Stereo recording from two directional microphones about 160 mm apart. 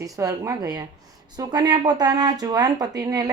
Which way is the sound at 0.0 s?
20° right (ahead or behind).